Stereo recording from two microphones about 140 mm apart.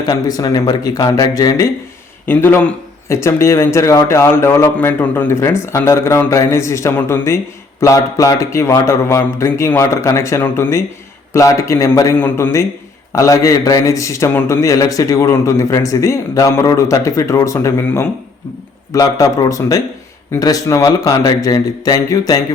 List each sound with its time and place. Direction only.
0.0 s speech: 25° left (ahead or behind)